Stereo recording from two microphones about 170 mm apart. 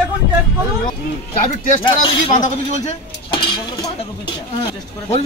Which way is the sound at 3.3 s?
25° left (ahead or behind).